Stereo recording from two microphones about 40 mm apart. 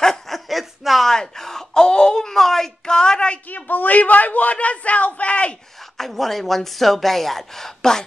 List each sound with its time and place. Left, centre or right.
0.0 s chuckle: centre
0.5 s a sound: centre
1.0 s speech: centre
3.4 s a man's voice: left
5.9 s speech: centre